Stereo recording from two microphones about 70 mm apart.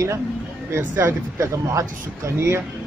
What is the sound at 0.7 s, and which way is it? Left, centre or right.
Speech, right.